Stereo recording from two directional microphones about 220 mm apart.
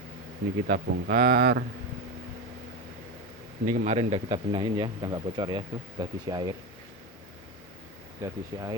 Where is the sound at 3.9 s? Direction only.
25° right (ahead or behind).